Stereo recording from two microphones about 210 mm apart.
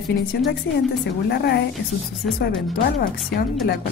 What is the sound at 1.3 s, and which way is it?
Speech, 50° left (ahead or behind).